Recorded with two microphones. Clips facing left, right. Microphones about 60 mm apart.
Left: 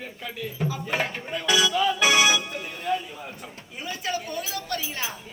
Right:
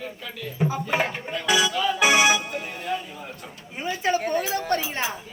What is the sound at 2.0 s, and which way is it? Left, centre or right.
Speech, right.